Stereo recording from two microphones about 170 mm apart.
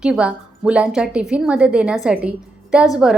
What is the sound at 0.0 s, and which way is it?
A woman's voice, 5° right (ahead or behind).